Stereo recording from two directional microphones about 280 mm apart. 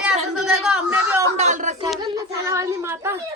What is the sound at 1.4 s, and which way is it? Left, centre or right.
Speech, right.